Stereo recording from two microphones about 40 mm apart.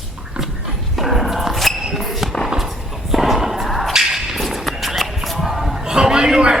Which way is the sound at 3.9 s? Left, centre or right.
Centre.